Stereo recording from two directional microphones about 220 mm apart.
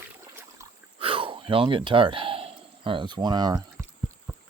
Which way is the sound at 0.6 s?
15° right (ahead or behind).